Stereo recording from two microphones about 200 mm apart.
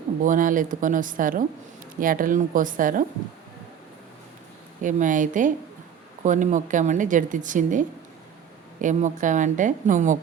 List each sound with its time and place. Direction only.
0.2 s a woman's voice: 40° right (ahead or behind)
4.8 s a woman's voice: 40° right (ahead or behind)